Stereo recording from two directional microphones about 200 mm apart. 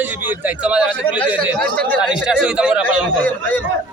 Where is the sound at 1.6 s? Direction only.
5° left (ahead or behind).